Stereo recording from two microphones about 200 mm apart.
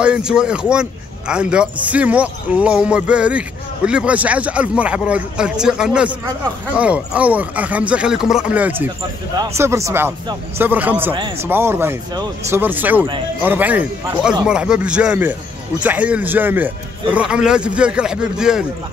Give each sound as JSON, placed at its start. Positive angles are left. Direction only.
{"t": 0.0, "sound": "a man's voice", "side_deg": -5}
{"t": 11.1, "sound": "speech", "side_deg": -25}
{"t": 11.4, "sound": "a man's voice", "side_deg": -10}